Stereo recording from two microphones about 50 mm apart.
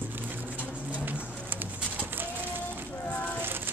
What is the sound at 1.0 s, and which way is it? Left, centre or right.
Pigeon, right.